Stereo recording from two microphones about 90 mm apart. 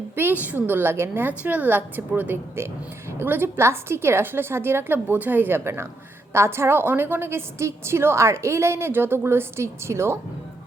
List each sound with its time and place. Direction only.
0.2 s a woman's voice: 20° right (ahead or behind)